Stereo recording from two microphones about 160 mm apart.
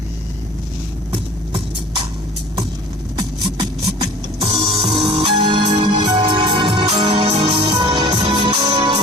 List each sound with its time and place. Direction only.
3.2 s music: 25° right (ahead or behind)
7.7 s music: 25° right (ahead or behind)
8.6 s music: 25° right (ahead or behind)